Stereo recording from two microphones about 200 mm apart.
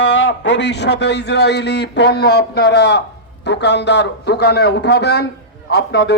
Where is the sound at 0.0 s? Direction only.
70° left (ahead or behind).